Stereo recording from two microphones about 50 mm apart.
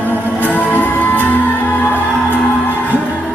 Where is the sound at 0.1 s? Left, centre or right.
Left.